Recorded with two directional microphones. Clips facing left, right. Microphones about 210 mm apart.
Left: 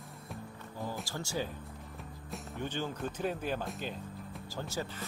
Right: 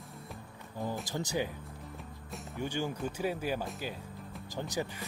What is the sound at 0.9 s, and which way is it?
Speech, 20° right (ahead or behind).